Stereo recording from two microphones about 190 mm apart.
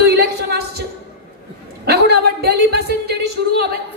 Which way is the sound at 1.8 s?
55° right (ahead or behind).